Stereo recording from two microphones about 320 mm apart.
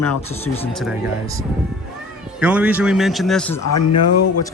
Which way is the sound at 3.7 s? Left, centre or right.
Left.